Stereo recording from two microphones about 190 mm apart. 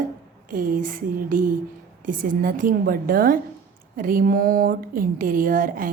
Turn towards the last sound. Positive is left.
turn(degrees=-45)  # may be behind; listen again after turning